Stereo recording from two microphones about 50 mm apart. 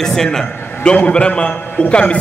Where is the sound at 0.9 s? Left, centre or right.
Left.